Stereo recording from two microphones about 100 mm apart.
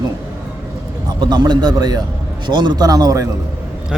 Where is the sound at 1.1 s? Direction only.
45° right (ahead or behind).